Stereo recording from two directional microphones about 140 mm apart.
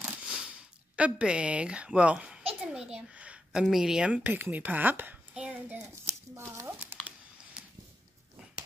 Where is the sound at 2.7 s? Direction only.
5° right (ahead or behind).